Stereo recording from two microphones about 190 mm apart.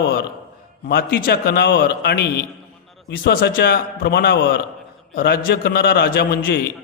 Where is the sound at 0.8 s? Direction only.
60° left (ahead or behind).